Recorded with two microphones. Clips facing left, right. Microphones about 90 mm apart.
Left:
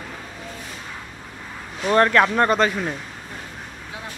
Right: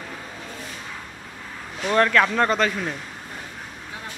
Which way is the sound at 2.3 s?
15° left (ahead or behind).